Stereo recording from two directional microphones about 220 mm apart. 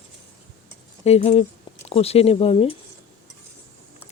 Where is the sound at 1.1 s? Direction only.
30° left (ahead or behind).